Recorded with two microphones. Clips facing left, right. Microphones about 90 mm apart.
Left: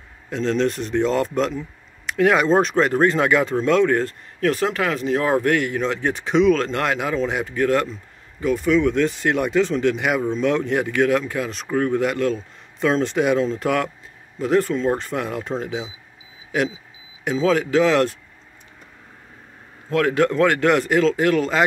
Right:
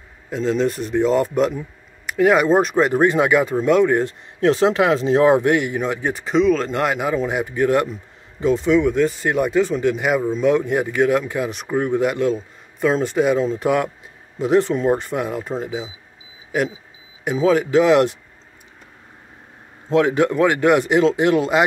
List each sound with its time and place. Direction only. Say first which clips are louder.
0.3 s speech: right 1 dB; 5° right (ahead or behind)
4.4 s speech: right 5 dB; 25° right (ahead or behind)
5.3 s speech: right 3 dB; 15° right (ahead or behind)
8.4 s speech: right 3 dB; 25° right (ahead or behind)
8.7 s speech: right 2 dB; 10° right (ahead or behind)
12.1 s speech: right 2 dB; 5° right (ahead or behind)
17.2 s speech: right 2 dB; 10° right (ahead or behind)
19.9 s speech: right 2 dB; 15° right (ahead or behind)